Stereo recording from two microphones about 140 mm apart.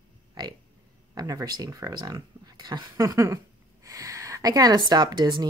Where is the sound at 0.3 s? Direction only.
30° right (ahead or behind).